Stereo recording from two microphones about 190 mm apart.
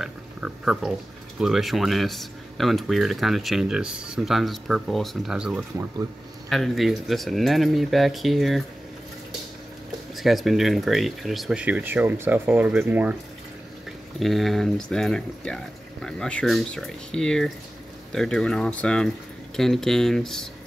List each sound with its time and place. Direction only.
0.0 s pig: centre (ahead or behind)
1.4 s speech: centre (ahead or behind)
10.1 s speech: centre (ahead or behind)
14.2 s speech: centre (ahead or behind)